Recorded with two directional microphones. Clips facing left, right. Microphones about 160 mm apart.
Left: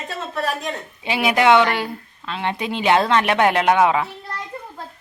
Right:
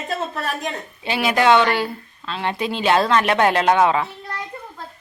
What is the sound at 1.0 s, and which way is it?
A woman's voice, 20° left (ahead or behind).